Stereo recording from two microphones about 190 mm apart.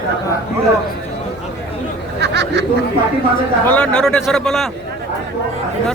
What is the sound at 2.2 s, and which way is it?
Chatter, 65° right (ahead or behind).